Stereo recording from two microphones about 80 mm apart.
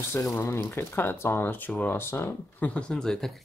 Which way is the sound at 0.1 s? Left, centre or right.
Left.